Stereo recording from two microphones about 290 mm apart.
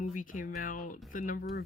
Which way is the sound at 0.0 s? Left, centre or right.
Left.